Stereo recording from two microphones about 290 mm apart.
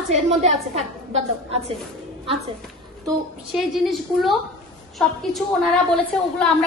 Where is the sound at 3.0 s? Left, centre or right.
Centre.